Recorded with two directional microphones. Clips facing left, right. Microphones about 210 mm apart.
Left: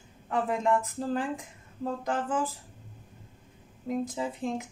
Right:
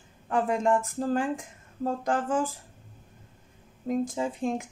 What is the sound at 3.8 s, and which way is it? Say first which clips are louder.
Speech: right 3 dB; 45° right (ahead or behind).